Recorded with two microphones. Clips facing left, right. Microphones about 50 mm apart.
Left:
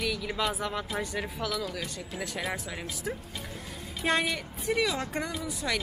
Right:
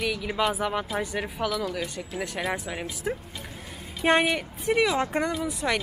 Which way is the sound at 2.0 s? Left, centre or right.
Centre.